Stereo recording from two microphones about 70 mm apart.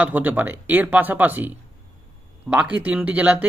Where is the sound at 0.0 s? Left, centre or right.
Right.